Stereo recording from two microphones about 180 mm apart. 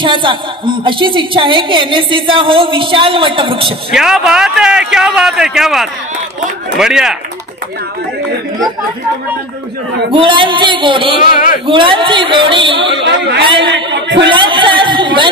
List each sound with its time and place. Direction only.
0.0 s a woman's voice: 25° right (ahead or behind)
3.9 s speech: 5° right (ahead or behind)
10.1 s a woman's voice: 25° right (ahead or behind)
13.7 s a sound: 80° right
14.3 s chatter: 25° right (ahead or behind)